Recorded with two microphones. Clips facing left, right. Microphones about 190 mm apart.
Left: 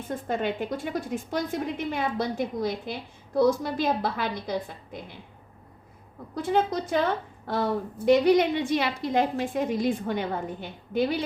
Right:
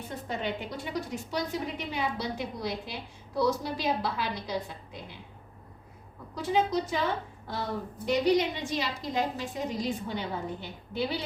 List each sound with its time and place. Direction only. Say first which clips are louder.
0.1 s a woman's voice: left 6 dB; 50° left (ahead or behind)
6.3 s a woman's voice: left 2 dB; 55° left (ahead or behind)
8.0 s a woman's voice: left 6 dB; 60° left (ahead or behind)